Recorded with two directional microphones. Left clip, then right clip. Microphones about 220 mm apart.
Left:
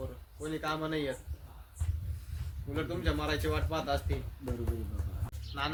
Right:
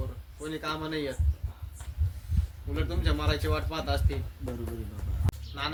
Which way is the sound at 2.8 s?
10° right (ahead or behind).